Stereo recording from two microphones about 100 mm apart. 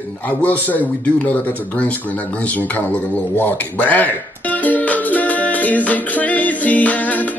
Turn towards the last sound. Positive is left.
turn(degrees=15)  # may be behind; listen again after turning